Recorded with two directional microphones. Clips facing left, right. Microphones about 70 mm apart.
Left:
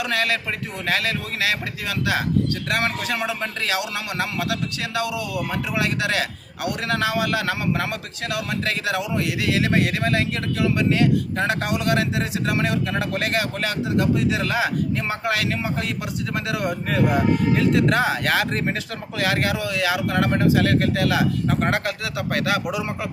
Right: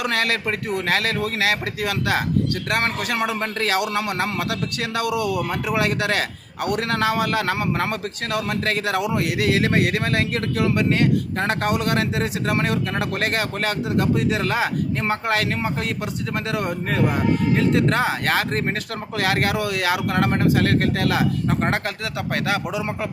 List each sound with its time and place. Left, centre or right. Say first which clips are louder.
0.0 s a man's voice: right 1 dB; right
17.7 s speech: even; right
18.7 s a man's voice: right 1 dB; right
21.6 s a man's voice: even; right